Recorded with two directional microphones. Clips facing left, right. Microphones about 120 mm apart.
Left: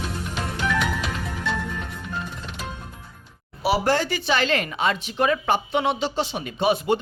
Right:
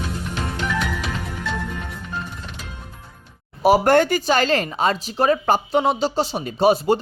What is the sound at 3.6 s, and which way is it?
Speech, 50° right (ahead or behind).